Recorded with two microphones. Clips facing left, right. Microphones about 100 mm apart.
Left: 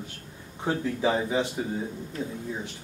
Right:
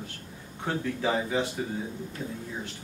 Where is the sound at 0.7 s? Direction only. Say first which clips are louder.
Left 3 dB; 15° left (ahead or behind).